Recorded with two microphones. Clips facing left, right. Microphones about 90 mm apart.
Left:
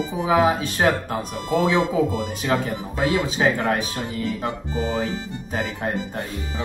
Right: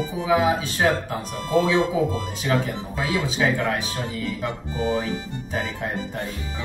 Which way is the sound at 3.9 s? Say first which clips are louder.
Left 2 dB; 20° left (ahead or behind).